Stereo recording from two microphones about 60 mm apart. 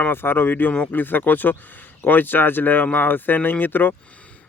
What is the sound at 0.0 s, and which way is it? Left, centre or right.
Speech, left.